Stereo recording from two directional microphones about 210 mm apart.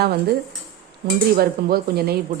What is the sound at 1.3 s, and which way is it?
Speech, 45° right (ahead or behind).